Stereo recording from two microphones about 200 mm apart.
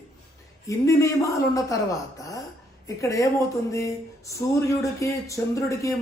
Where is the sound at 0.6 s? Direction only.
15° left (ahead or behind).